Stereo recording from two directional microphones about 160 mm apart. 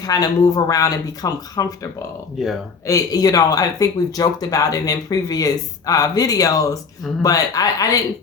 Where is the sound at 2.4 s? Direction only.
Centre (ahead or behind).